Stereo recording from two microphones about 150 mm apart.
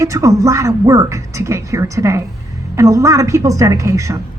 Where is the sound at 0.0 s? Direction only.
20° right (ahead or behind).